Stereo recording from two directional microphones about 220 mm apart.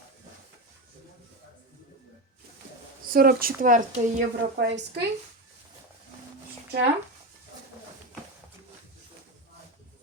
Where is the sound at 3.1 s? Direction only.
40° right (ahead or behind).